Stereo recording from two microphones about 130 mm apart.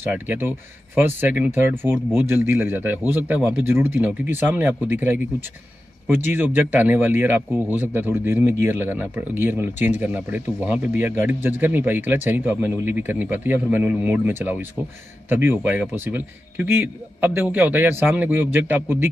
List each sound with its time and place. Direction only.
0.0 s a man's voice: 15° right (ahead or behind)